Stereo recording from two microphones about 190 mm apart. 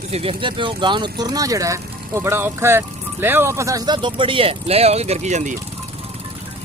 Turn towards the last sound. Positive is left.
turn(degrees=-40)  # may be behind; listen again after turning